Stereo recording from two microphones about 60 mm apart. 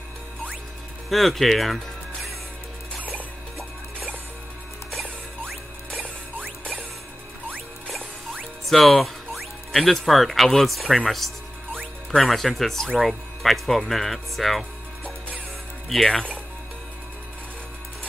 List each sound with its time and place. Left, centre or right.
1.1 s speech: centre
5.4 s music: centre
8.6 s music: centre
9.7 s speech: centre
16.0 s speech: centre